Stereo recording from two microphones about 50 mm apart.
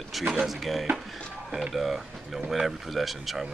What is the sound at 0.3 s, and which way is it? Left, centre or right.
Speech, centre.